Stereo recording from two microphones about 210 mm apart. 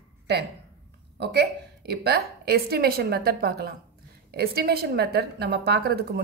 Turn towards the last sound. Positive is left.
turn(degrees=-50)  # may be behind; listen again after turning